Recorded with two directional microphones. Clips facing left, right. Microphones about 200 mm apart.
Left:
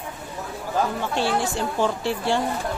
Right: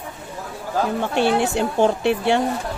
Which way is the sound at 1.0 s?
60° right (ahead or behind).